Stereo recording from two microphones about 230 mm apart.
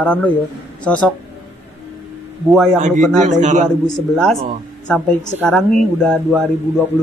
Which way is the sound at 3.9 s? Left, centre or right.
Centre.